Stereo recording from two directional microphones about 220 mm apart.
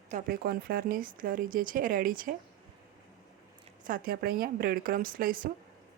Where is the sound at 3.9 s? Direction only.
40° right (ahead or behind).